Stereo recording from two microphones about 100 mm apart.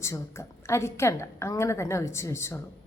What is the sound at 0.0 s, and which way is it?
A woman's voice, 30° left (ahead or behind).